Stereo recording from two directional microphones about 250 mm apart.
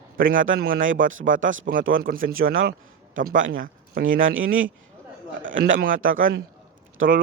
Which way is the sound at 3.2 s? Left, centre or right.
Right.